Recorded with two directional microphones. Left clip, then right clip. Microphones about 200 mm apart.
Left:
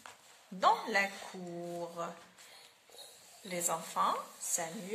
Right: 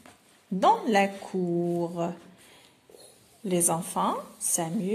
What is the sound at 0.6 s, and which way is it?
A woman's voice, 30° right (ahead or behind).